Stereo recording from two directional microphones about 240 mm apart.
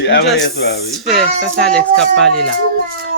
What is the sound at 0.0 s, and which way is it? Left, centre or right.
Speech, left.